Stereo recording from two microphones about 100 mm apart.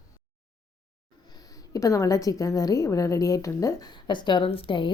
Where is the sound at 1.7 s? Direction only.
35° left (ahead or behind).